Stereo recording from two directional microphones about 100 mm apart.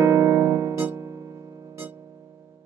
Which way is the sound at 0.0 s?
30° right (ahead or behind).